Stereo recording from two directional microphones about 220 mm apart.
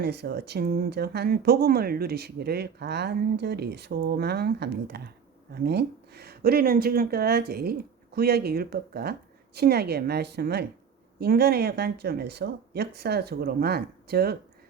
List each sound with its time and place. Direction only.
0.0 s speech: 50° right (ahead or behind)